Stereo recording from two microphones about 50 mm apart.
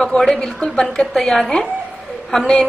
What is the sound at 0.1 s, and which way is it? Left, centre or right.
A woman's voice, centre.